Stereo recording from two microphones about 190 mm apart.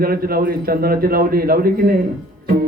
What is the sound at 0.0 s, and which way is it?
Music, 50° right (ahead or behind).